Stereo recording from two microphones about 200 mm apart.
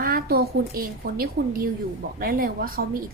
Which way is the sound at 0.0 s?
50° right (ahead or behind).